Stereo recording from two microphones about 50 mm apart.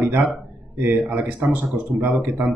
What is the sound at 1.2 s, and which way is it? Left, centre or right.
A man's voice, right.